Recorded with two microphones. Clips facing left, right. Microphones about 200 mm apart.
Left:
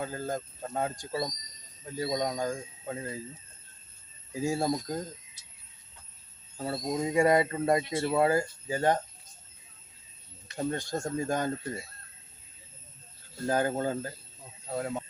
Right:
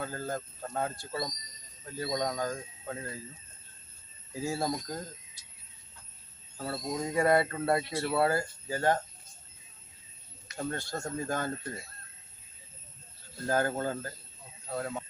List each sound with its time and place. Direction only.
0.0 s speech: 15° left (ahead or behind)
4.4 s speech: 15° left (ahead or behind)
6.6 s speech: 20° left (ahead or behind)
10.6 s speech: 15° left (ahead or behind)
13.5 s speech: 15° left (ahead or behind)